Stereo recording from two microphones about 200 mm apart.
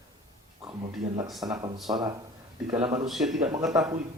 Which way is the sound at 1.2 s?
Centre (ahead or behind).